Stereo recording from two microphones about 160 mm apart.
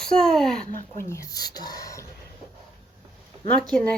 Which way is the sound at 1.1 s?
20° left (ahead or behind).